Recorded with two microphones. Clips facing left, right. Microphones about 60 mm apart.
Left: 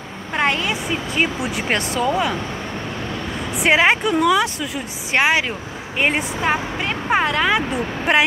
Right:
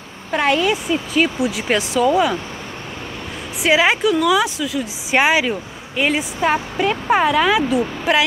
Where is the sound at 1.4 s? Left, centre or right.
Centre.